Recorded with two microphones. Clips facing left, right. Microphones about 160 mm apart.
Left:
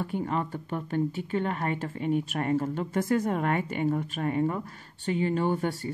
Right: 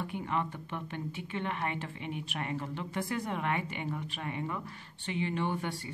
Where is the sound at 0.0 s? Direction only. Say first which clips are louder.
Left 5 dB; 40° left (ahead or behind).